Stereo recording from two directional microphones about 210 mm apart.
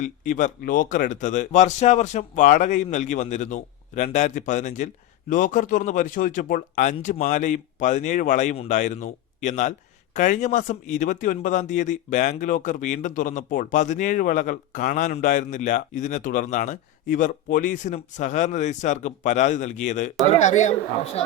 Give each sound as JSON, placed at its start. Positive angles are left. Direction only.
{"t": 0.0, "sound": "speech", "side_deg": 35}